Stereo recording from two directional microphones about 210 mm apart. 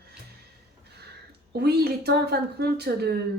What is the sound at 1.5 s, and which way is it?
A woman's voice, 50° right (ahead or behind).